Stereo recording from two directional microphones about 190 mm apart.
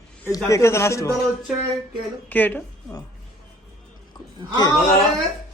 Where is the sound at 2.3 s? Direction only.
10° left (ahead or behind).